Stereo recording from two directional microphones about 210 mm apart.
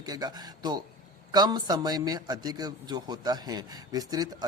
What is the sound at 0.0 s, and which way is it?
A man's voice, 20° right (ahead or behind).